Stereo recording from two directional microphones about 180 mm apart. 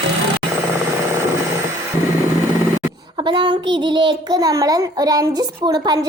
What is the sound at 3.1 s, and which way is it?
A child's voice, 25° right (ahead or behind).